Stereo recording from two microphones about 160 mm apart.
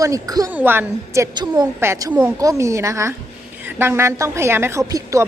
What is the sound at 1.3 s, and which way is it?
A woman's voice, 25° right (ahead or behind).